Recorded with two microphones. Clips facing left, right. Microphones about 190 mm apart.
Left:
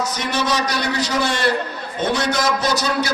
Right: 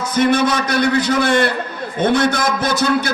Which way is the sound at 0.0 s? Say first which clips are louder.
Right 8 dB; 55° right (ahead or behind).